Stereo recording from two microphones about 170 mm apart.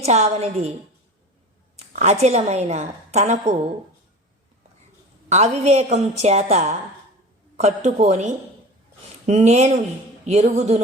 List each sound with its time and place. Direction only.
0.0 s a woman's voice: 40° right (ahead or behind)
2.0 s a woman's voice: 40° right (ahead or behind)
5.3 s a woman's voice: 40° right (ahead or behind)